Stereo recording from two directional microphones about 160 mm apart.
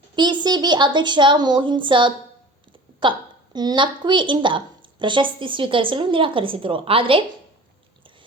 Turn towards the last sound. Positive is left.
turn(degrees=-35)  # may be behind; listen again after turning